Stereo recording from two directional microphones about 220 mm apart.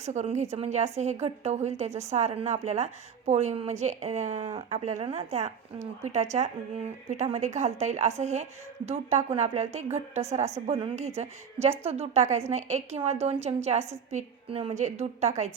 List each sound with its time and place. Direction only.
0.0 s a woman's voice: 30° right (ahead or behind)